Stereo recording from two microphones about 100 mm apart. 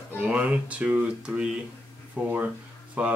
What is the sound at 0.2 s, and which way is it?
Speech, 15° right (ahead or behind).